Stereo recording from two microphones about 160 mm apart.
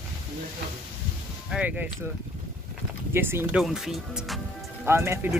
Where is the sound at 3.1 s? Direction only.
15° right (ahead or behind).